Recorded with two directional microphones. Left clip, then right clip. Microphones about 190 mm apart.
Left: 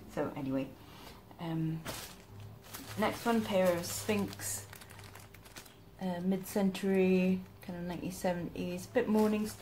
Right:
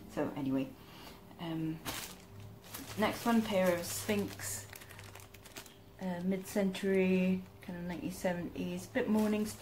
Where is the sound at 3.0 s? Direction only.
5° left (ahead or behind).